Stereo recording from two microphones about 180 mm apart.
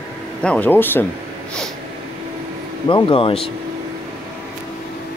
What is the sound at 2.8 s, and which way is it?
Speech, 30° left (ahead or behind).